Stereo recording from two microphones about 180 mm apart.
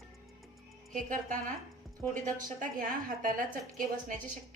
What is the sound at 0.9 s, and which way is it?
A woman's voice, 45° right (ahead or behind).